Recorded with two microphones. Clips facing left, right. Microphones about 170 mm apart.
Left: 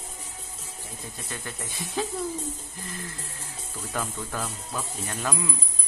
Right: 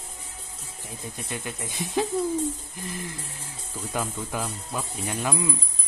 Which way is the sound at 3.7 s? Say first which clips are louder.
Right 2 dB; 10° right (ahead or behind).